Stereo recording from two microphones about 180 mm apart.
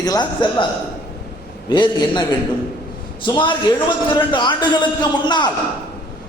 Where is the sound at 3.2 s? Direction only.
25° left (ahead or behind).